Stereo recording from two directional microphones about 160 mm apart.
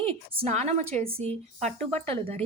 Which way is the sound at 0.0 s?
40° right (ahead or behind).